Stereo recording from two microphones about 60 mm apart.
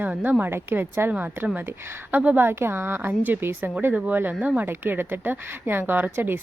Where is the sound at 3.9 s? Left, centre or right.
Right.